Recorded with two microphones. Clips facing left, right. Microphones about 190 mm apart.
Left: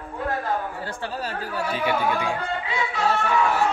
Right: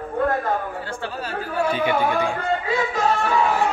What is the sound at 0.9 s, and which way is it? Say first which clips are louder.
Speech: right 1 dB; 40° left (ahead or behind).